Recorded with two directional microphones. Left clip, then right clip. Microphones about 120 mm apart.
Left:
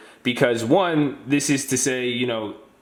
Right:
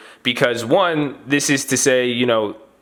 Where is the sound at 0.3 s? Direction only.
40° right (ahead or behind).